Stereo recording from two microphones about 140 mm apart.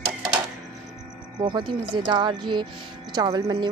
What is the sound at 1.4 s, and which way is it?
Speech, 35° right (ahead or behind).